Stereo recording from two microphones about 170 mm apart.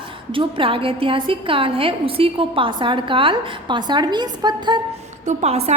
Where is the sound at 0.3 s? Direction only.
30° right (ahead or behind).